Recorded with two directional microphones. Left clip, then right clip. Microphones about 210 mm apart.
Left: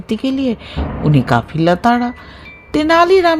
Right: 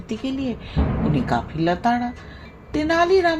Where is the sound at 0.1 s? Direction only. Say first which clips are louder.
Left 9 dB; 50° left (ahead or behind).